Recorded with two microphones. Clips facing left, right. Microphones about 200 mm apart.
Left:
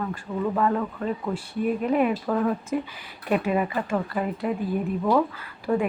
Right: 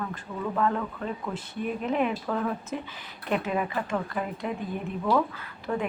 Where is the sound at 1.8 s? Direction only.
10° left (ahead or behind).